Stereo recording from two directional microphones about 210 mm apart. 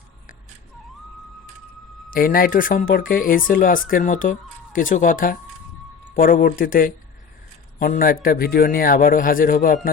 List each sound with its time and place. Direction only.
2.0 s a man's voice: 45° left (ahead or behind)